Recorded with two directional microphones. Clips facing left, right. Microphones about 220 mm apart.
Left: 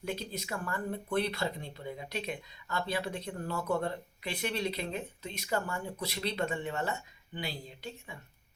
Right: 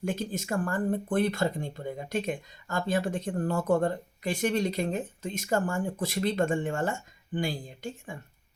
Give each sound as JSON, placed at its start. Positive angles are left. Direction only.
{"t": 0.0, "sound": "speech", "side_deg": -50}